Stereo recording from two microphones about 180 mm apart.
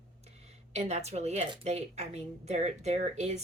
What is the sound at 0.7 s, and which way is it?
Speech, 40° right (ahead or behind).